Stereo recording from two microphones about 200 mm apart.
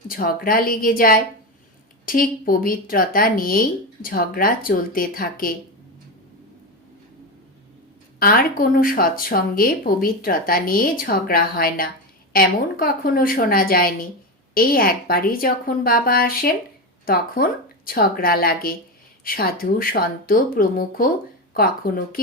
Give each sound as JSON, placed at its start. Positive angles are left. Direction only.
{"t": 0.1, "sound": "speech", "side_deg": 45}
{"t": 8.2, "sound": "speech", "side_deg": 45}